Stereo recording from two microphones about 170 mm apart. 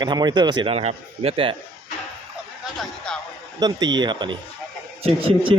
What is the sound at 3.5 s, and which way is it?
A man's voice, 25° right (ahead or behind).